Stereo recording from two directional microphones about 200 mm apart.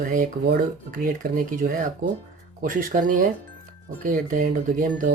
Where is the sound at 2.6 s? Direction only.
45° right (ahead or behind).